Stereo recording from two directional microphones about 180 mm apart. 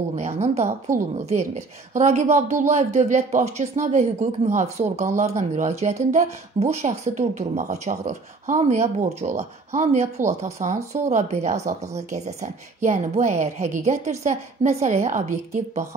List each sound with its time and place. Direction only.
0.1 s speech: 40° right (ahead or behind)